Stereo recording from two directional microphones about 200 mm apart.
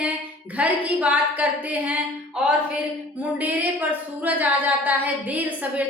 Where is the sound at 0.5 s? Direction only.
5° right (ahead or behind).